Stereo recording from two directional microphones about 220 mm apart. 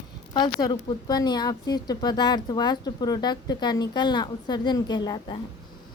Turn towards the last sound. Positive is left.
turn(degrees=20)  # may be behind; listen again after turning